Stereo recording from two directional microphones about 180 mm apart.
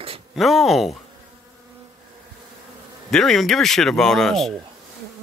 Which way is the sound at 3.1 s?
Centre (ahead or behind).